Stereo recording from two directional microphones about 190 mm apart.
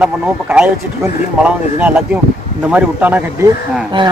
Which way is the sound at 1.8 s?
10° right (ahead or behind).